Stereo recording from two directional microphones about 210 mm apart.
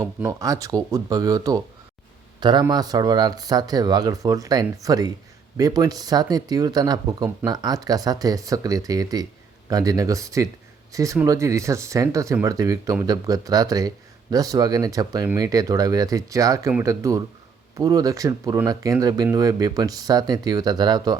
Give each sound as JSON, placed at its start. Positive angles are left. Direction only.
{"t": 0.2, "sound": "speech", "side_deg": -15}